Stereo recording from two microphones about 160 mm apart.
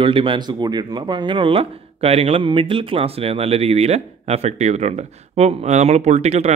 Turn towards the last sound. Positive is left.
turn(degrees=-45)  # may be behind; listen again after turning